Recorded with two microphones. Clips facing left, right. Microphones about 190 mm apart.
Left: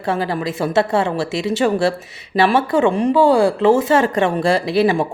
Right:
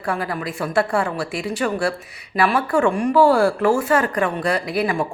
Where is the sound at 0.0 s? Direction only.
25° left (ahead or behind).